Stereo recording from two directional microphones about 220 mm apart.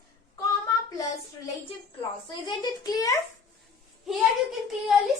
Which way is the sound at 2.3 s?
20° left (ahead or behind).